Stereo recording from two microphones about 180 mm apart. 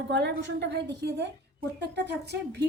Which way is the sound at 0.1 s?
70° right (ahead or behind).